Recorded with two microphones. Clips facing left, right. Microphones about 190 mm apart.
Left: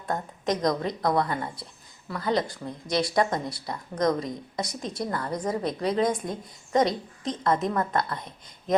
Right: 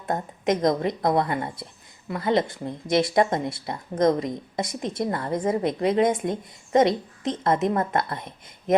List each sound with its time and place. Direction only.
0.1 s speech: 25° right (ahead or behind)